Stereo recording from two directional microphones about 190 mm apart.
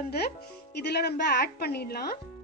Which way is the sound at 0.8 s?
60° left (ahead or behind).